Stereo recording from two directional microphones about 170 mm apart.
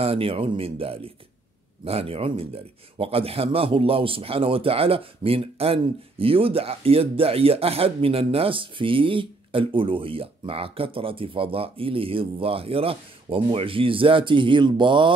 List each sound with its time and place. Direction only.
0.0 s a man's voice: 35° right (ahead or behind)